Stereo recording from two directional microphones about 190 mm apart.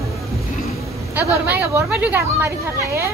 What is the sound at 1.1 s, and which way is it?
Speech, 10° right (ahead or behind).